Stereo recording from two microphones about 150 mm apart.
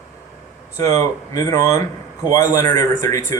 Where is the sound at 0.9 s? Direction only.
25° left (ahead or behind).